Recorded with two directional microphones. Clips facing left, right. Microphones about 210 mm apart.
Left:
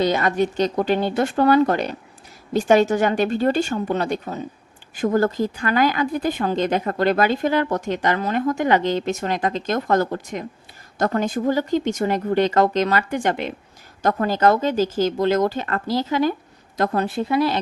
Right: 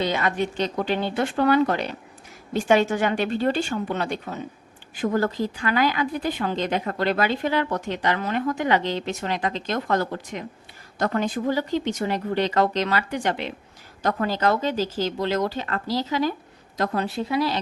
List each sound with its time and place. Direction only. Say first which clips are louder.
0.0 s speech: left 5 dB; 40° left (ahead or behind)